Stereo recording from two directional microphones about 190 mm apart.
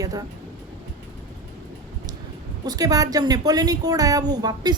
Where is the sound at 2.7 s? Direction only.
20° right (ahead or behind).